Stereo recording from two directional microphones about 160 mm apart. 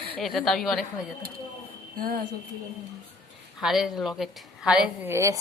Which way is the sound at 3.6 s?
Centre (ahead or behind).